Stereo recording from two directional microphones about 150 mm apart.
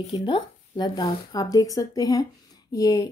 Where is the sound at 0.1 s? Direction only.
30° left (ahead or behind).